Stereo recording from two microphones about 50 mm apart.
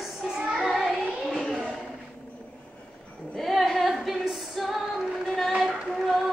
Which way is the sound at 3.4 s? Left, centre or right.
Centre.